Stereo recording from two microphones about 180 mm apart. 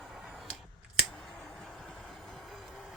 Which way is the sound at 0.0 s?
Centre (ahead or behind).